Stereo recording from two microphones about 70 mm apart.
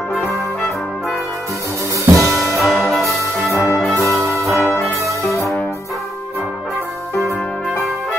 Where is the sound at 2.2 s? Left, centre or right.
Centre.